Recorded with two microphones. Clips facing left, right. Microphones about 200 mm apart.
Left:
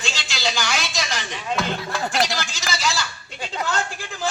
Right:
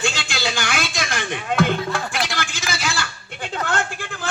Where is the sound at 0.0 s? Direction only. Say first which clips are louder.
Right 3 dB; 55° right (ahead or behind).